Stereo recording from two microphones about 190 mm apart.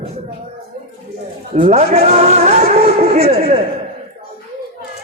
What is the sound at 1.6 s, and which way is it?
A man's voice, 40° right (ahead or behind).